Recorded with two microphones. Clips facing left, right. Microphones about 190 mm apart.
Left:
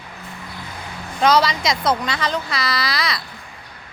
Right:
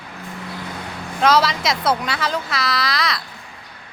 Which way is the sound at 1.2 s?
5° right (ahead or behind).